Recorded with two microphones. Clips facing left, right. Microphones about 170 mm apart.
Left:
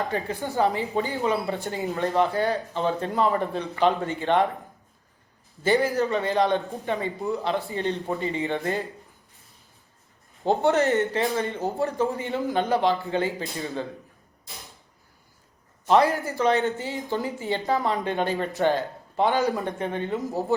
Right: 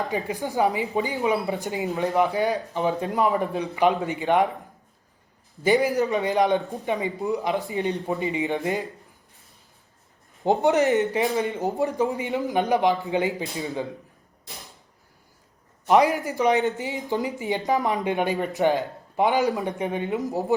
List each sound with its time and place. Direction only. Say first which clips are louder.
0.1 s a man's voice: right 1 dB; 15° right (ahead or behind)
5.6 s a man's voice: right 2 dB; 15° right (ahead or behind)
6.6 s speech: right 1 dB; centre (ahead or behind)
6.8 s a man's voice: right 2 dB; 15° right (ahead or behind)
10.4 s a man's voice: right 1 dB; 15° right (ahead or behind)
15.9 s a man's voice: right 1 dB; 15° right (ahead or behind)